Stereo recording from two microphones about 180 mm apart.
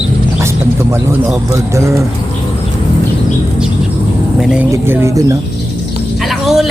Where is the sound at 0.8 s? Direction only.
15° right (ahead or behind).